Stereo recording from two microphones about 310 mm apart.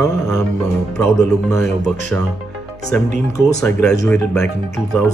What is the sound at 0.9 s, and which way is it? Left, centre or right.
Speech, centre.